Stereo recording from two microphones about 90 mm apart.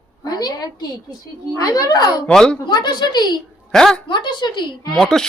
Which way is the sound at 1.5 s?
45° left (ahead or behind).